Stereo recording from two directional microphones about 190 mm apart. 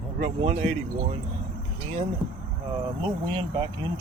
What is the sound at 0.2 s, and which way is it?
Speech, 35° right (ahead or behind).